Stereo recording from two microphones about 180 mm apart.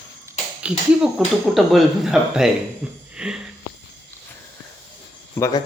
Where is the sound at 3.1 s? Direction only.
5° right (ahead or behind).